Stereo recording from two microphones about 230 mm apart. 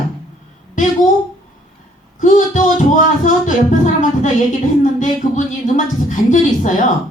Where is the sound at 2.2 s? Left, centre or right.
Left.